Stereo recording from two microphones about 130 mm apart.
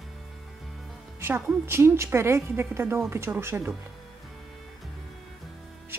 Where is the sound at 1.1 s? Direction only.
20° right (ahead or behind).